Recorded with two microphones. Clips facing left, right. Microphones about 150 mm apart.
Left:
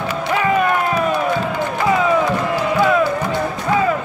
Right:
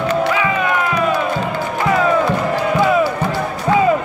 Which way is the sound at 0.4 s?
45° left (ahead or behind).